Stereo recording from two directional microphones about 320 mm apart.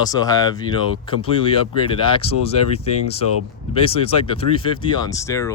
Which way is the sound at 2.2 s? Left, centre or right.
Left.